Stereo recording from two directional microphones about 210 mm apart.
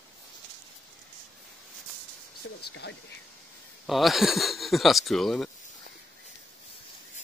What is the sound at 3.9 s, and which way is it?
Speech, centre (ahead or behind).